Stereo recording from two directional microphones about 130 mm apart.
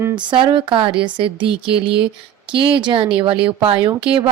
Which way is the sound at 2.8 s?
40° right (ahead or behind).